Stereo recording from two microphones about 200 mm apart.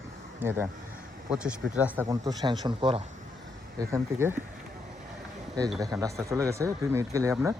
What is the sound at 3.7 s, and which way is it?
Speech, 15° right (ahead or behind).